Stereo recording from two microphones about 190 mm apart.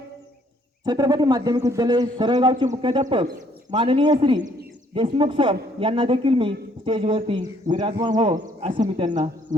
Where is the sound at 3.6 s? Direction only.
25° right (ahead or behind).